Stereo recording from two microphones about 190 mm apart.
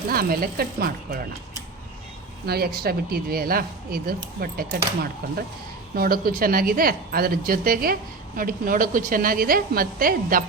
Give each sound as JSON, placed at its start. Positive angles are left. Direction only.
{"t": 0.1, "sound": "speech", "side_deg": -50}
{"t": 2.5, "sound": "speech", "side_deg": -55}